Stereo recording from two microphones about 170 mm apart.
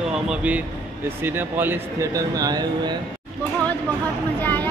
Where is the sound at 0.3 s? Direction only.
10° right (ahead or behind); by 3.0 s 25° right (ahead or behind).